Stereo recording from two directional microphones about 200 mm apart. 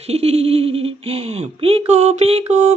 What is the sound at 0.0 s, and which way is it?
Giggle, 30° right (ahead or behind).